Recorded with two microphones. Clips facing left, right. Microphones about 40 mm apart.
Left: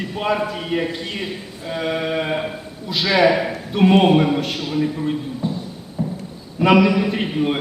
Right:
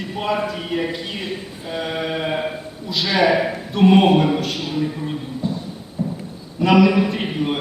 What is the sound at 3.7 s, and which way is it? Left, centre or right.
A man's voice, centre.